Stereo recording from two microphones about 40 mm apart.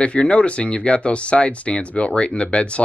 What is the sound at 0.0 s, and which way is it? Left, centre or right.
Speech, left.